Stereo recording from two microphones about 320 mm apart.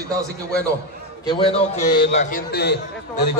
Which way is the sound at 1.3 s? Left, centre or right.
Centre.